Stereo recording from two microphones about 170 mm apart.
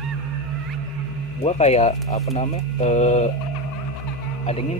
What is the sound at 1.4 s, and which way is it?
Speech, 40° left (ahead or behind).